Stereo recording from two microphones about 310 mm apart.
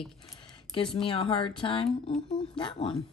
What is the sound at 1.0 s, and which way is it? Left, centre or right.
Speech, centre.